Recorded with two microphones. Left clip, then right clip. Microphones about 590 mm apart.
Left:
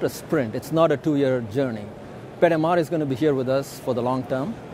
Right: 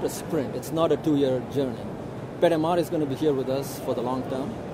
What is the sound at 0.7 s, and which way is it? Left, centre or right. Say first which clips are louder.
Speech: left 3 dB; left.